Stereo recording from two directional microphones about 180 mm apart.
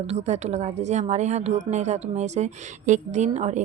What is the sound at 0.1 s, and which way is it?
A woman's voice, 35° right (ahead or behind).